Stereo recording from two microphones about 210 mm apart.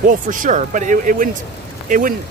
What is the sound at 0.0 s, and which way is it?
Speech, 40° right (ahead or behind).